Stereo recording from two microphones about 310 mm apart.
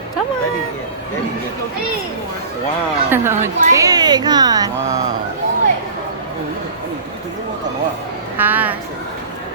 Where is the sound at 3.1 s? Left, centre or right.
Centre.